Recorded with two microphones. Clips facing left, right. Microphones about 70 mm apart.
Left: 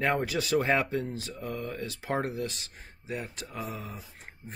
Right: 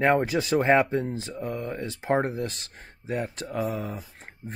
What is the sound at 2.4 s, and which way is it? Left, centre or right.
Speech, right.